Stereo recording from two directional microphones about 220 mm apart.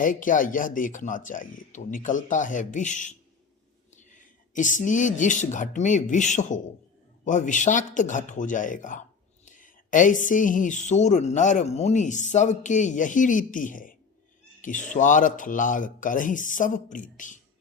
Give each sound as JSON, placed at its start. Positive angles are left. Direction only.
{"t": 0.0, "sound": "speech", "side_deg": 35}